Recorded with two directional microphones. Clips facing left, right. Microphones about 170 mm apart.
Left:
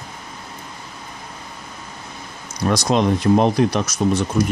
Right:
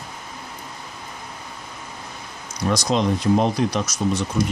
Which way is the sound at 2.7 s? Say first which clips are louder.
Left 3 dB; 60° left (ahead or behind).